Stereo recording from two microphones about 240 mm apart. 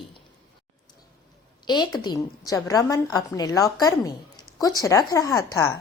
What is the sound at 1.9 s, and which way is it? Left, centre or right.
A woman's voice, centre.